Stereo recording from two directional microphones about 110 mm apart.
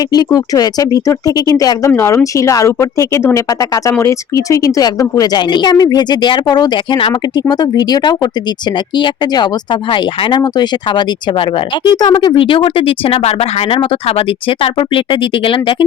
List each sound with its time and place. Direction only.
0.1 s speech: 35° left (ahead or behind); by 15.5 s 50° left (ahead or behind)